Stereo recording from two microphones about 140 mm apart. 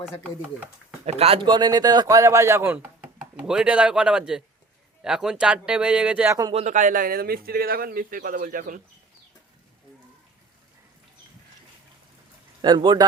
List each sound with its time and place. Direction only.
1.0 s speech: 50° right (ahead or behind)
1.5 s speech: 30° right (ahead or behind); by 6.2 s 10° right (ahead or behind)
6.2 s speech: 20° right (ahead or behind)
6.5 s speech: 55° right (ahead or behind); by 8.8 s 75° right (ahead or behind)
12.6 s speech: 30° right (ahead or behind)